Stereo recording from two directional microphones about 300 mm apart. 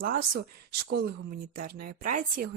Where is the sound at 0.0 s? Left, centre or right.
Right.